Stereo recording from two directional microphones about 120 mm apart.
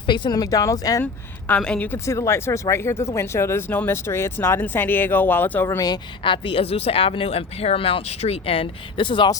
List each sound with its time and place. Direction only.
0.0 s speech: 40° left (ahead or behind)
1.0 s speech: 10° left (ahead or behind)
2.0 s speech: 25° left (ahead or behind)
5.6 s speech: 30° left (ahead or behind)